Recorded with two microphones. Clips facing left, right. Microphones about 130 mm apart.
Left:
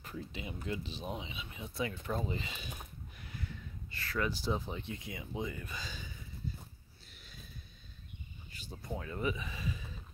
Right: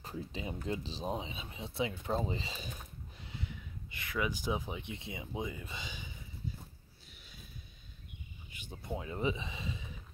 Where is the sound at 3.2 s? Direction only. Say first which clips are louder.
Right 1 dB; 20° right (ahead or behind).